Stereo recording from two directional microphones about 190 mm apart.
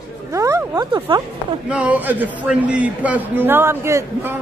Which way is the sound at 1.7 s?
5° right (ahead or behind).